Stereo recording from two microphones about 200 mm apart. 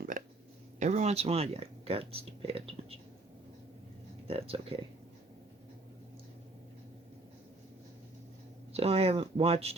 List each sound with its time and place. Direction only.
0.8 s speech: 35° right (ahead or behind)
4.3 s speech: 30° right (ahead or behind)
8.7 s speech: 30° right (ahead or behind)